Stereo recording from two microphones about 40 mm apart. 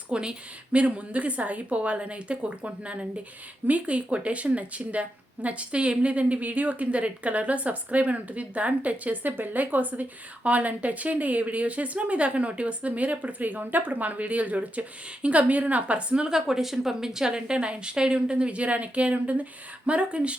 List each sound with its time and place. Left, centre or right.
0.1 s speech: right
9.3 s speech: right
16.5 s a woman's voice: centre; by 20.3 s right